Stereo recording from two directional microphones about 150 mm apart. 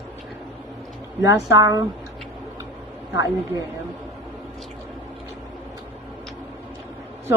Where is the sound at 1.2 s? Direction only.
20° right (ahead or behind).